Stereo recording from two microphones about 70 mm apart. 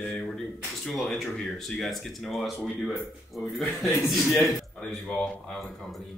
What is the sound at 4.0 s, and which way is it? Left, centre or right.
Speech, centre.